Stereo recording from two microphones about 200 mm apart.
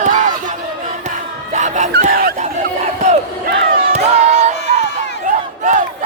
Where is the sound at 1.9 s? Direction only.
50° right (ahead or behind).